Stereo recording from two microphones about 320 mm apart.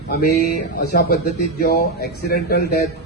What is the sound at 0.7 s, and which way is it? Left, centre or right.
Speech, left.